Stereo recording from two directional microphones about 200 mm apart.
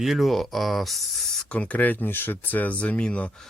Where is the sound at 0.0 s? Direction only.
Centre (ahead or behind).